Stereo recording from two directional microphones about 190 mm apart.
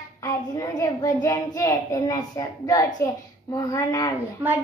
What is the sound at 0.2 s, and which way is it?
A child's voice, 20° left (ahead or behind).